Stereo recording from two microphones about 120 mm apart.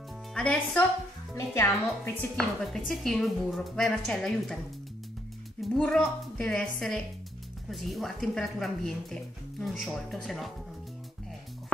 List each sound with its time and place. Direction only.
0.3 s speech: 10° left (ahead or behind)
1.3 s a woman's voice: 20° left (ahead or behind)
2.3 s speech: centre (ahead or behind)
5.6 s speech: 5° left (ahead or behind)